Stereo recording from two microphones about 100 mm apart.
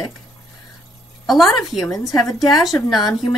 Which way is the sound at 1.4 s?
Centre (ahead or behind).